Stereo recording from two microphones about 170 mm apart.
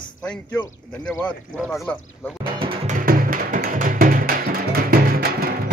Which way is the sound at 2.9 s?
55° right (ahead or behind).